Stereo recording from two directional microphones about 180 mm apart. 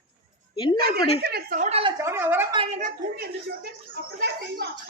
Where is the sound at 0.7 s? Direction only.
55° right (ahead or behind).